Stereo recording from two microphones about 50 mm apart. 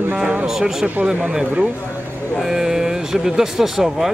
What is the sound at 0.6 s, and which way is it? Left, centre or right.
Speech, centre.